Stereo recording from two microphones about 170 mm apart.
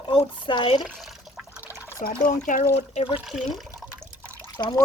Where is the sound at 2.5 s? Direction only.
50° left (ahead or behind).